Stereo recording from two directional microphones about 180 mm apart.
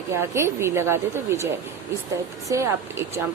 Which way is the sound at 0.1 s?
15° right (ahead or behind).